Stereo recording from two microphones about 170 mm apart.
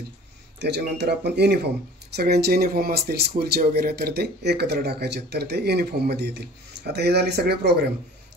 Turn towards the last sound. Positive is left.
turn(degrees=-70)  # may be behind; listen again after turning